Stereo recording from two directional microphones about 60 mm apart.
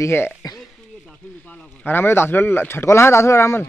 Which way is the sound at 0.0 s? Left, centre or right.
Left.